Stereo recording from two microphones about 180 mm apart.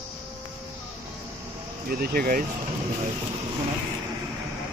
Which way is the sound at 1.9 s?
55° right (ahead or behind).